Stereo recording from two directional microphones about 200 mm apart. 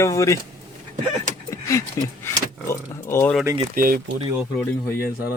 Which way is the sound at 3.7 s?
45° right (ahead or behind).